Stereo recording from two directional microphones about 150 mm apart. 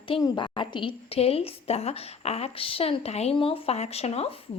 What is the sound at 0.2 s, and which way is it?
A woman's voice, 30° left (ahead or behind).